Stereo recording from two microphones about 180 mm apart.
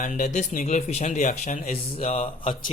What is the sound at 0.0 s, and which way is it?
Speech, 40° left (ahead or behind).